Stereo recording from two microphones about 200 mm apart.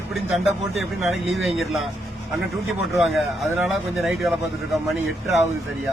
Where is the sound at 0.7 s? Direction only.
75° right (ahead or behind).